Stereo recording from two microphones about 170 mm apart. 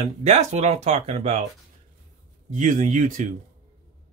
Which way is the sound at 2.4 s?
45° right (ahead or behind).